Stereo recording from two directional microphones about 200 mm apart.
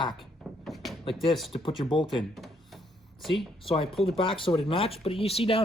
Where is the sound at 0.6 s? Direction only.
Centre (ahead or behind).